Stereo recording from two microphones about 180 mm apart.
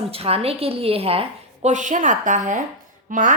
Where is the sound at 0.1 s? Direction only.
30° right (ahead or behind).